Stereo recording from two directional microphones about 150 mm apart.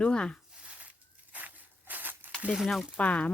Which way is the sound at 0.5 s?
5° right (ahead or behind).